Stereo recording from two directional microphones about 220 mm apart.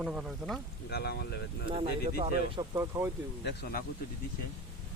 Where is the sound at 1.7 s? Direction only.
25° right (ahead or behind).